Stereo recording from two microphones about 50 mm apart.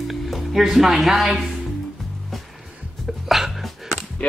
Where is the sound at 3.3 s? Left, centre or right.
Centre.